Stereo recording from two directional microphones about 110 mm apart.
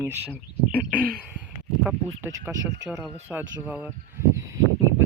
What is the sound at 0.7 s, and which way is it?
Speech, 15° left (ahead or behind).